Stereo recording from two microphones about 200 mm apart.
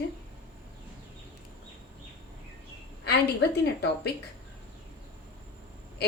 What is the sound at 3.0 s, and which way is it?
A woman's voice, 55° left (ahead or behind).